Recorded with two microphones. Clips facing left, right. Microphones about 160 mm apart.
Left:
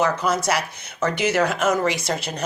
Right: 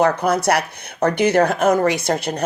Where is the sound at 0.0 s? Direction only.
60° right (ahead or behind).